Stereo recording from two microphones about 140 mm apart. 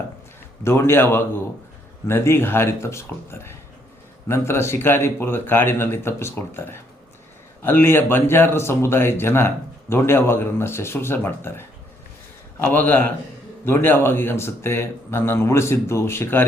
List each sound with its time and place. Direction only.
0.6 s a man's voice: 15° left (ahead or behind)